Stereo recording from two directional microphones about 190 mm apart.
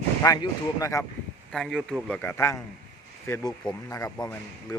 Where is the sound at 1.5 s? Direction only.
Centre (ahead or behind); by 4.7 s 15° left (ahead or behind).